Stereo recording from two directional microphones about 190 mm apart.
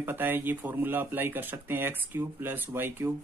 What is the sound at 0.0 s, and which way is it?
Speech, 10° right (ahead or behind).